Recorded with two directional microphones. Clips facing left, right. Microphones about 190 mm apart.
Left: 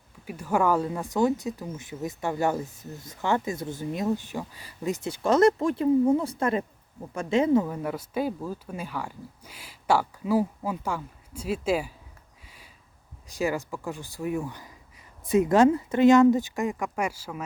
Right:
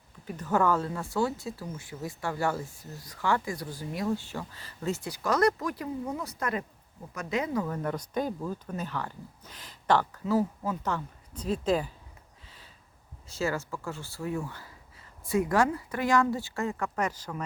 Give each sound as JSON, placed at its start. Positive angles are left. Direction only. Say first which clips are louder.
{"t": 0.3, "sound": "speech", "louder": "left 2 dB", "side_deg": 10}
{"t": 7.7, "sound": "speech", "louder": "left 1 dB", "side_deg": 5}
{"t": 13.2, "sound": "speech", "louder": "left 3 dB", "side_deg": 15}